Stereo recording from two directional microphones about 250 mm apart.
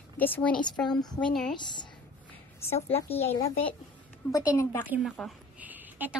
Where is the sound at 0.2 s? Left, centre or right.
Centre.